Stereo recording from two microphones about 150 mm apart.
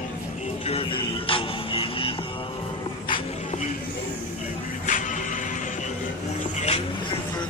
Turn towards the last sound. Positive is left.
turn(degrees=45)  # may be behind; listen again after turning